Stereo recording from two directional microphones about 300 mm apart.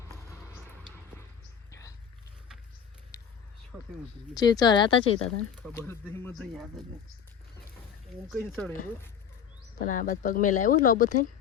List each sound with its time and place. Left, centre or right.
3.7 s speech: centre
4.4 s speech: centre
8.3 s speech: centre
9.8 s speech: left